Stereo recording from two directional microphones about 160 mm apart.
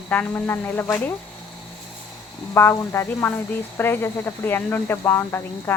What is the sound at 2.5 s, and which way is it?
A woman's voice, 15° left (ahead or behind).